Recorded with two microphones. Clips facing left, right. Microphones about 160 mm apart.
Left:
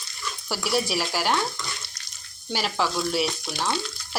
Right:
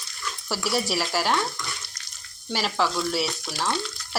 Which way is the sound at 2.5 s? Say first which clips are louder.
Right 1 dB; centre (ahead or behind).